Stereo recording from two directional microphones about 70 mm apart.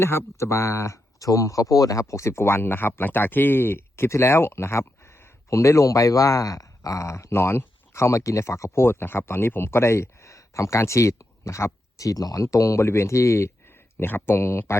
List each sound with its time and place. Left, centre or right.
0.0 s speech: left